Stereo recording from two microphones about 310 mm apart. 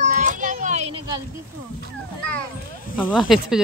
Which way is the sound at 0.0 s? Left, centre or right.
Right.